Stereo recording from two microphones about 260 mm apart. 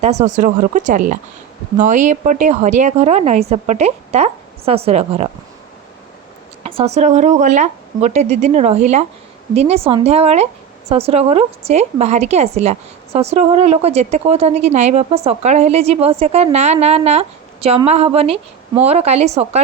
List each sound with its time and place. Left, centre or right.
0.0 s speech: right
6.6 s speech: right